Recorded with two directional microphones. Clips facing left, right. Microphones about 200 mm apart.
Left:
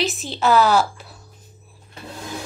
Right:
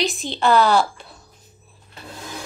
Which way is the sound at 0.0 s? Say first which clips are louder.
Even; centre (ahead or behind).